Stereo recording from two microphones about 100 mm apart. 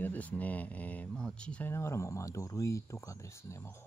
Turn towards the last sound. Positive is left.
turn(degrees=30)  # may be behind; listen again after turning